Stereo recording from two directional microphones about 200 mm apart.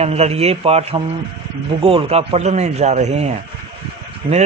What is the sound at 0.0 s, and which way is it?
A man's voice, 30° right (ahead or behind).